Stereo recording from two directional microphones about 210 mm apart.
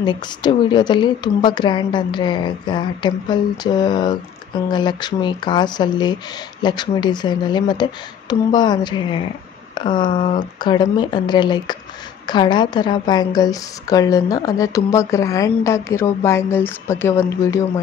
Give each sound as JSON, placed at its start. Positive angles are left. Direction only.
{"t": 0.0, "sound": "a woman's voice", "side_deg": 20}